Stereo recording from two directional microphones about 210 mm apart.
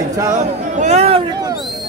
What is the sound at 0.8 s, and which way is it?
Speech, 30° right (ahead or behind).